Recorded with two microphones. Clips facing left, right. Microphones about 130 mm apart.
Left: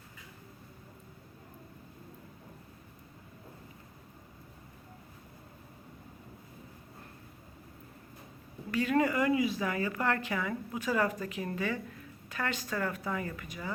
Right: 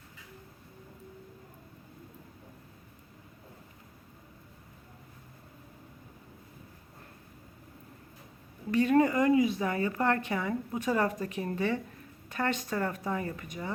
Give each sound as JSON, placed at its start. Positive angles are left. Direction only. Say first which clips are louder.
{"t": 8.9, "sound": "a woman's voice", "louder": "right 3 dB", "side_deg": -25}